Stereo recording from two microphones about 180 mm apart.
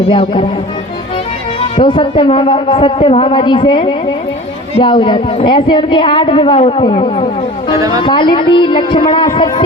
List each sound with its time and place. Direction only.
0.0 s speech: 30° left (ahead or behind)
1.7 s speech: 30° left (ahead or behind)